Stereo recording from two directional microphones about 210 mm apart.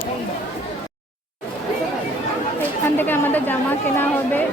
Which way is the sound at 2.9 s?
10° left (ahead or behind).